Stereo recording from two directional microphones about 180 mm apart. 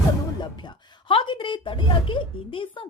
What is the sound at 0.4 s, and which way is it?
A woman's voice, 25° left (ahead or behind).